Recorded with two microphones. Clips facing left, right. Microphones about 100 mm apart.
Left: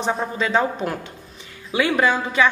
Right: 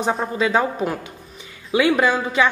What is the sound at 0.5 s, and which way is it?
Speech, 10° right (ahead or behind).